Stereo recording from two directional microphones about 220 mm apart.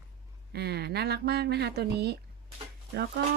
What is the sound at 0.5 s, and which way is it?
Speech, 50° right (ahead or behind).